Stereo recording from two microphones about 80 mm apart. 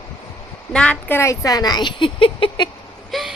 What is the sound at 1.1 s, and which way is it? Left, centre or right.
Speech, left.